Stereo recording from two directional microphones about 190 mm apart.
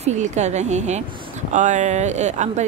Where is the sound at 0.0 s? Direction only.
35° right (ahead or behind).